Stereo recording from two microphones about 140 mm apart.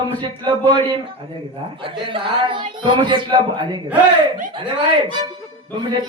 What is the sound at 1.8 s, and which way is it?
A man's voice, 35° right (ahead or behind).